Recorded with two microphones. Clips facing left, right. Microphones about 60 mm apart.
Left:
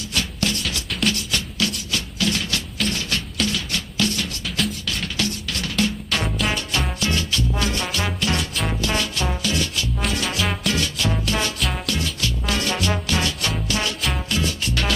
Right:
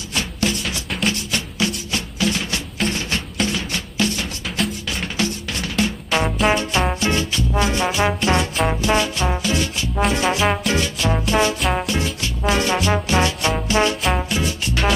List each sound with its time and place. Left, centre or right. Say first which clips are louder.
0.1 s music: right 3 dB; right
4.5 s music: right 2 dB; centre
5.0 s music: right 4 dB; right